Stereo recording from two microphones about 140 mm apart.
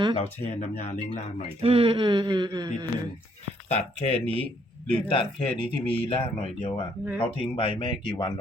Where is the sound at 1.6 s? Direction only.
40° right (ahead or behind).